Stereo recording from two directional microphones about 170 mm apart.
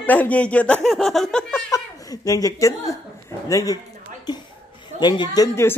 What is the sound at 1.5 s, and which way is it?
Speech, 20° left (ahead or behind).